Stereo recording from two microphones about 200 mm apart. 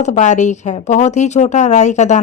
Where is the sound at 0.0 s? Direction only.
35° left (ahead or behind).